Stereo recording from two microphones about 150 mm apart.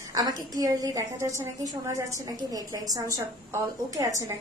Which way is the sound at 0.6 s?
20° right (ahead or behind).